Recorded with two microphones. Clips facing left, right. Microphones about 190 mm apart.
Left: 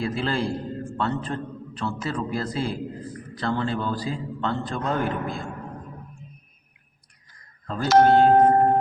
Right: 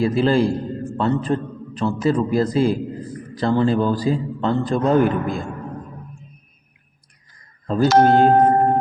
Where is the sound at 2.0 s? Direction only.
15° right (ahead or behind).